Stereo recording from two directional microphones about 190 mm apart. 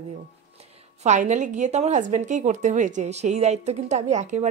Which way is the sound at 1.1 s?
40° right (ahead or behind).